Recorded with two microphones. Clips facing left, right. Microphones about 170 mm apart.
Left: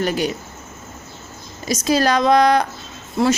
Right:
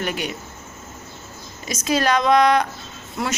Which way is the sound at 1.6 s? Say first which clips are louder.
Left 3 dB; 35° left (ahead or behind).